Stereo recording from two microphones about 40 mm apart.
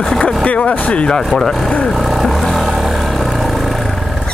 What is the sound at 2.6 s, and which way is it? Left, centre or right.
Vehicle, centre.